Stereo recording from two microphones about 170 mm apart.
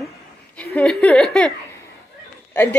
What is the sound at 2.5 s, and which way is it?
Speech, 10° left (ahead or behind).